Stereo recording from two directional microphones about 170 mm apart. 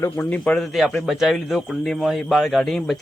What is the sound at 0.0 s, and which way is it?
A man's voice, 10° left (ahead or behind).